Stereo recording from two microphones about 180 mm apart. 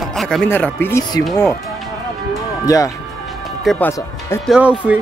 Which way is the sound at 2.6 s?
20° left (ahead or behind).